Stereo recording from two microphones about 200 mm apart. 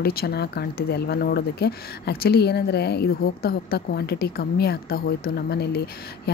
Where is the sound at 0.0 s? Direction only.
50° left (ahead or behind).